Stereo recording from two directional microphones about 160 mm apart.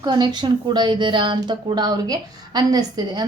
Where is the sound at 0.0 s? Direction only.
25° right (ahead or behind).